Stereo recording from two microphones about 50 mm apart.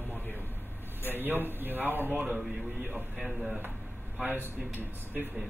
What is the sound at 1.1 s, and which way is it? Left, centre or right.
A man's voice, right.